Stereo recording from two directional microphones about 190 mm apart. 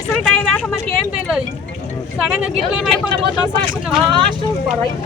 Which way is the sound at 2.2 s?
5° right (ahead or behind).